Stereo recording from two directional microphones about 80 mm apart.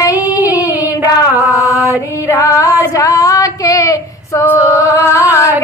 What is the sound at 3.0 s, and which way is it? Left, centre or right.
Child singing, left.